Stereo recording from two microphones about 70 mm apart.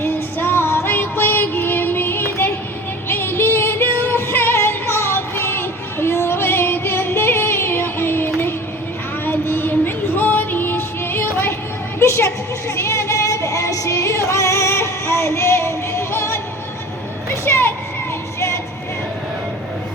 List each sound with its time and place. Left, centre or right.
0.0 s music: left
11.9 s a sound: left
18.3 s music: left